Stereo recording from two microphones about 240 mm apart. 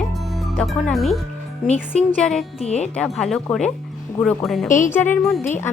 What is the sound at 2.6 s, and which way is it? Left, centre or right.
Speech, left.